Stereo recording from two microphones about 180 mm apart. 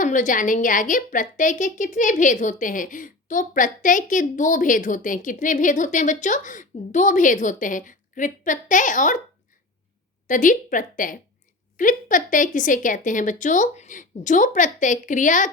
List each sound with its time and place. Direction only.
0.0 s a woman's voice: 45° left (ahead or behind)
10.2 s a woman's voice: 45° left (ahead or behind)